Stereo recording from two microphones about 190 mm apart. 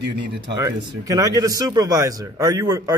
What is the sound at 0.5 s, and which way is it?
Speech, 15° right (ahead or behind).